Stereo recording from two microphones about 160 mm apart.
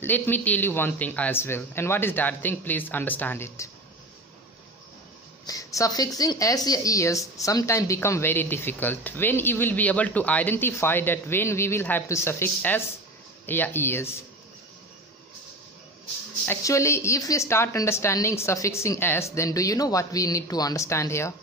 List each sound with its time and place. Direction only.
0.0 s speech: 10° left (ahead or behind)
5.5 s speech: 20° left (ahead or behind)
16.4 s a woman's voice: 20° left (ahead or behind)